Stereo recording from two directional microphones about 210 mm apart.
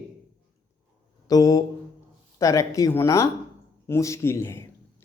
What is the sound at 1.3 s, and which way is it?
A man's voice, 15° left (ahead or behind).